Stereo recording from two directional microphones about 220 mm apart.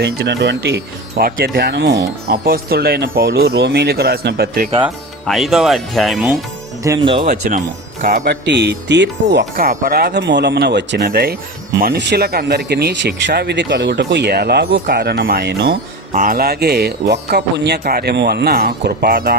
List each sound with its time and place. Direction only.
0.0 s speech: 50° right (ahead or behind)
5.2 s speech: centre (ahead or behind)
6.8 s speech: 20° right (ahead or behind)
7.3 s speech: 35° right (ahead or behind)